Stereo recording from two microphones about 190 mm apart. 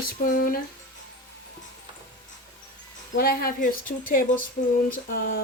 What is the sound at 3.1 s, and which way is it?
A woman's voice, 50° left (ahead or behind).